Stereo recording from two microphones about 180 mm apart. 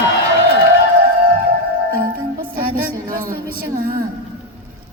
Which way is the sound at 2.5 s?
55° right (ahead or behind).